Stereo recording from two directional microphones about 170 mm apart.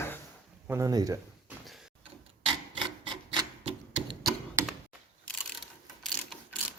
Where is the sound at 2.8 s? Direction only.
25° right (ahead or behind).